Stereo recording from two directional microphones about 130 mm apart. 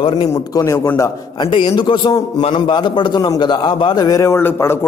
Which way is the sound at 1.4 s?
40° left (ahead or behind).